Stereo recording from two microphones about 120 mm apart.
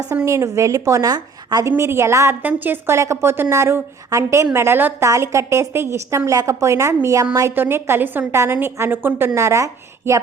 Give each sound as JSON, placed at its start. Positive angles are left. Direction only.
{"t": 0.1, "sound": "a woman's voice", "side_deg": -25}
{"t": 1.7, "sound": "a woman's voice", "side_deg": -20}